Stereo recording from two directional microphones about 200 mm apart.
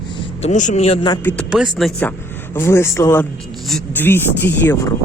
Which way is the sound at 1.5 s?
Centre (ahead or behind).